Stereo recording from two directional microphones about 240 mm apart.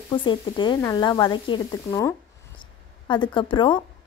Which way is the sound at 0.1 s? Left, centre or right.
Centre.